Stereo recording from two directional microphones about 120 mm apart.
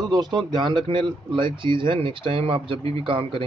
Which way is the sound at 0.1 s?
35° right (ahead or behind).